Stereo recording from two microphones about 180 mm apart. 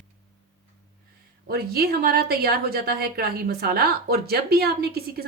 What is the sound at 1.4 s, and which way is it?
A woman's voice, 60° right (ahead or behind).